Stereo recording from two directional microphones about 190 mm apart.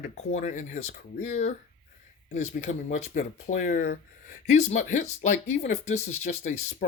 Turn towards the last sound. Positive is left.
turn(degrees=40)  # may be behind; listen again after turning